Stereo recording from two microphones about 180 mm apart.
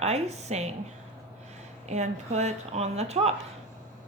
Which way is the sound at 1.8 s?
40° right (ahead or behind).